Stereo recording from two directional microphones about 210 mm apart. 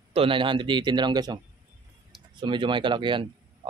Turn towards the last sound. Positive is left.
turn(degrees=-20)  # may be behind; listen again after turning